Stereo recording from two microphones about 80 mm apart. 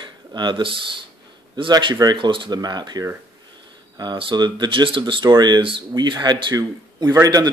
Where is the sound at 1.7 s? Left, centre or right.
Right.